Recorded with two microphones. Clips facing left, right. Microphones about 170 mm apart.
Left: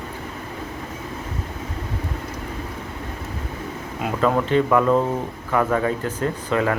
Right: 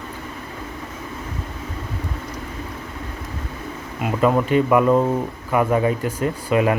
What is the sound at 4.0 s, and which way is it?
Speech, 5° right (ahead or behind).